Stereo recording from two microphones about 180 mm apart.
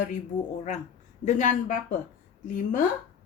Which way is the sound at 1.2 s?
45° left (ahead or behind).